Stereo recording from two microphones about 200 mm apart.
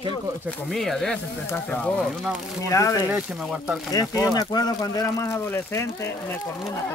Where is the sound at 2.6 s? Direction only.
15° left (ahead or behind).